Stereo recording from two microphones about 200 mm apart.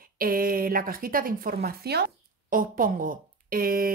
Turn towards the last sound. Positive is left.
turn(degrees=-45)  # may be behind; listen again after turning